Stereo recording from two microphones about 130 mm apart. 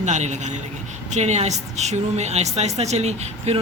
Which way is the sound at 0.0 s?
65° right (ahead or behind).